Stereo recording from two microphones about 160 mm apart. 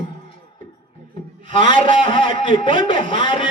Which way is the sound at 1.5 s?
35° left (ahead or behind).